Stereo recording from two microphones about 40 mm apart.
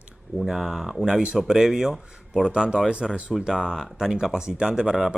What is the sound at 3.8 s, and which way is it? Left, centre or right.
Speech, centre.